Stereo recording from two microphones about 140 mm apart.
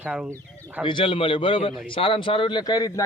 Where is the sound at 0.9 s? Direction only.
35° left (ahead or behind).